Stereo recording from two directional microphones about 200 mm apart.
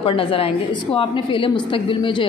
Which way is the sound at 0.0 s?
25° left (ahead or behind).